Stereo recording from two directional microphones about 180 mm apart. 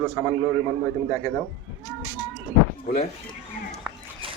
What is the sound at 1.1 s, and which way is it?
Speech, 15° left (ahead or behind).